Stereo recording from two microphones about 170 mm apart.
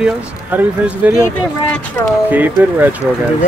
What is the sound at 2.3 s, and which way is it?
Speech, 10° right (ahead or behind).